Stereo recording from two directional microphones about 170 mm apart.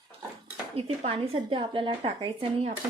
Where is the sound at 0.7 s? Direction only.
35° right (ahead or behind).